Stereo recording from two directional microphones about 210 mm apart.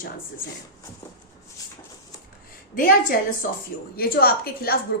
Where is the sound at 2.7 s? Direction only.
45° left (ahead or behind).